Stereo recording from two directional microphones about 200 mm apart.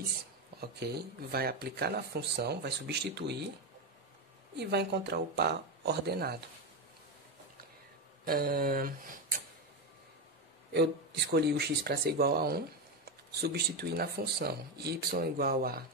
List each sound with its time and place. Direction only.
0.6 s speech: 55° right (ahead or behind)
4.6 s speech: 55° right (ahead or behind)
8.3 s speech: 45° right (ahead or behind)
10.7 s speech: 55° right (ahead or behind)